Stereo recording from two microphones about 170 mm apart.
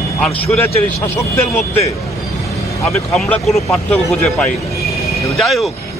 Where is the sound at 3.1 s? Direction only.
5° left (ahead or behind).